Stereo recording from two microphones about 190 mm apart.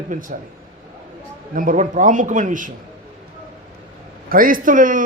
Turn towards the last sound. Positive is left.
turn(degrees=-45)  # may be behind; listen again after turning